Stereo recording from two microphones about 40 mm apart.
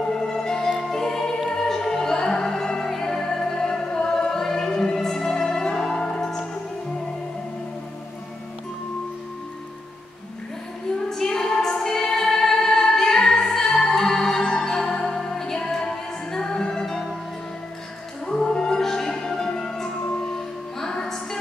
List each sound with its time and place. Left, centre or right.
0.0 s music: centre
11.1 s music: centre
18.2 s music: centre